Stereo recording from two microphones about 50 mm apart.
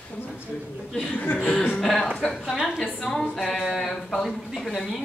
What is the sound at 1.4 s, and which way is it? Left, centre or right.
Speech, left.